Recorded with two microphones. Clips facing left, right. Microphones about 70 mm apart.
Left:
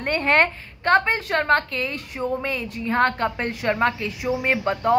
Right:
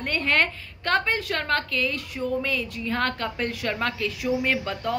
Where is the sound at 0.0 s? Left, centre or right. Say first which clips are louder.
Left 4 dB; left.